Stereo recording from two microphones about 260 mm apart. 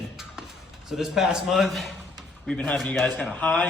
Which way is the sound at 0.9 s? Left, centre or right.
Centre.